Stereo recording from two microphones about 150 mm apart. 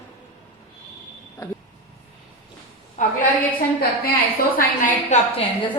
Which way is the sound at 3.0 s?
55° left (ahead or behind).